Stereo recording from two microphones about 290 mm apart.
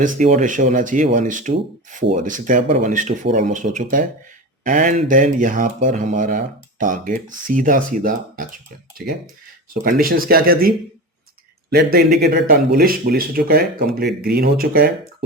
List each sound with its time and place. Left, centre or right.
0.0 s speech: right